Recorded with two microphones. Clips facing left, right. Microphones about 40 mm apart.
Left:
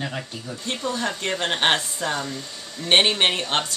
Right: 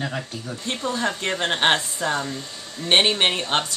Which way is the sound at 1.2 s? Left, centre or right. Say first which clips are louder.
Right 1 dB; centre.